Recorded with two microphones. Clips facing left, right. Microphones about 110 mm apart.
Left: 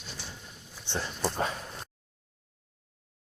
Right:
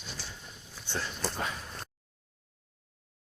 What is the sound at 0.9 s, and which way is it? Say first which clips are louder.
Speech: left 3 dB; 20° left (ahead or behind).